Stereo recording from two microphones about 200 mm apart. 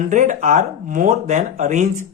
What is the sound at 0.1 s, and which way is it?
Speech, 40° right (ahead or behind).